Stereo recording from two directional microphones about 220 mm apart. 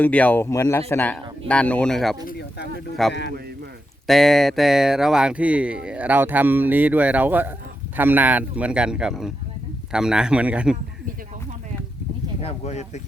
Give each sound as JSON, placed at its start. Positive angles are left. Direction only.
{"t": 0.0, "sound": "a man's voice", "side_deg": 5}
{"t": 2.2, "sound": "bird", "side_deg": 50}
{"t": 3.1, "sound": "a man's voice", "side_deg": 50}
{"t": 4.0, "sound": "speech", "side_deg": 0}
{"t": 12.4, "sound": "speech", "side_deg": 30}